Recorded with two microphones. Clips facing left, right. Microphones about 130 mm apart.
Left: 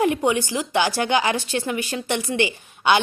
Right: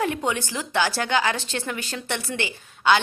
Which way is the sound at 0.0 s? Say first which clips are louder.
Left 5 dB; 15° left (ahead or behind).